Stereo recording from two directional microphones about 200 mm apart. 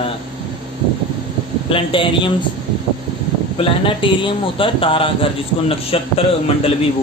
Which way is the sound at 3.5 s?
25° left (ahead or behind).